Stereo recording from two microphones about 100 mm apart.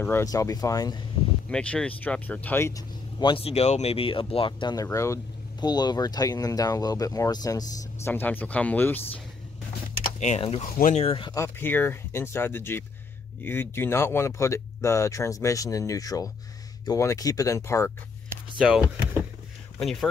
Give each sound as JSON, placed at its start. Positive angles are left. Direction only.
{"t": 0.2, "sound": "speech", "side_deg": 35}
{"t": 1.5, "sound": "speech", "side_deg": 10}
{"t": 3.2, "sound": "speech", "side_deg": 55}
{"t": 3.4, "sound": "speech", "side_deg": 90}
{"t": 4.8, "sound": "speech", "side_deg": 30}
{"t": 5.6, "sound": "speech", "side_deg": 45}
{"t": 8.0, "sound": "speech", "side_deg": 20}
{"t": 10.3, "sound": "speech", "side_deg": 85}
{"t": 11.3, "sound": "speech", "side_deg": 25}
{"t": 18.6, "sound": "speech", "side_deg": -5}
{"t": 19.8, "sound": "speech", "side_deg": 5}